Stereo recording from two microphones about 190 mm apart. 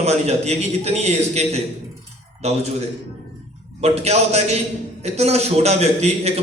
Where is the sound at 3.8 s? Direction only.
35° right (ahead or behind).